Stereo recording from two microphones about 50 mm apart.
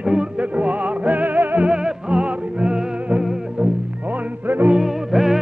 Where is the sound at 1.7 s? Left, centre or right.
Right.